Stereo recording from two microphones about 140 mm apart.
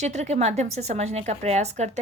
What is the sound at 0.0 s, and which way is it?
A woman's voice, 55° right (ahead or behind).